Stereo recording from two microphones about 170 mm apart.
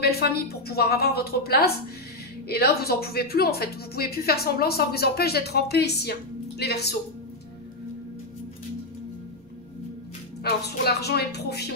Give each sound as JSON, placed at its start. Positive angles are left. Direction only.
{"t": 0.0, "sound": "a woman's voice", "side_deg": 65}
{"t": 10.4, "sound": "speech", "side_deg": 70}